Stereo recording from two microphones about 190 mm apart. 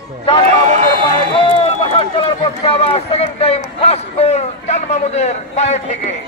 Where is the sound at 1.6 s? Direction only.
30° left (ahead or behind).